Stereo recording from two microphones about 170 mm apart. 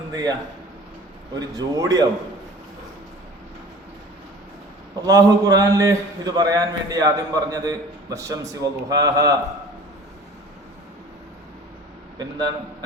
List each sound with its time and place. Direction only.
0.1 s a man's voice: 20° right (ahead or behind)
1.4 s a man's voice: 20° right (ahead or behind)
4.9 s a man's voice: 20° right (ahead or behind)
12.2 s a man's voice: 25° right (ahead or behind)